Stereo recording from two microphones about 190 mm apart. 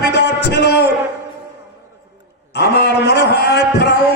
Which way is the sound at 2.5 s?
60° left (ahead or behind).